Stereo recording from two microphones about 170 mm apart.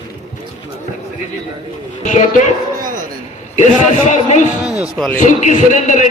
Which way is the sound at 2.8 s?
55° right (ahead or behind).